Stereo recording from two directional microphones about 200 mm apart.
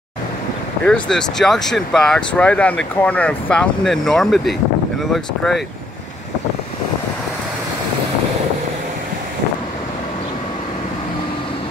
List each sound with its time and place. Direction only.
0.8 s speech: 5° left (ahead or behind)